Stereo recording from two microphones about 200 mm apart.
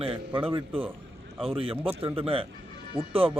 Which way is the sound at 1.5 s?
30° right (ahead or behind).